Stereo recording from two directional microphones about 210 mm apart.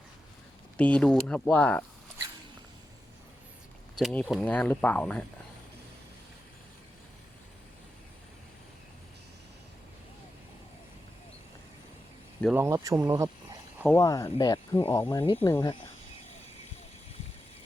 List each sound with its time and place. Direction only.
0.8 s speech: 5° left (ahead or behind)
3.9 s speech: 5° left (ahead or behind)
12.5 s speech: 15° right (ahead or behind)
13.8 s speech: 15° left (ahead or behind)